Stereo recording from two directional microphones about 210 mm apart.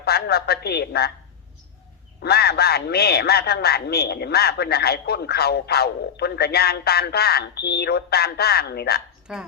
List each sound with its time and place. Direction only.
0.0 s a woman's voice: 50° left (ahead or behind)
2.2 s a man's voice: 50° left (ahead or behind)
9.2 s speech: 5° right (ahead or behind)